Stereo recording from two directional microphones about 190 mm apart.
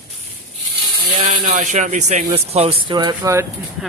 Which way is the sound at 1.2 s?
40° right (ahead or behind).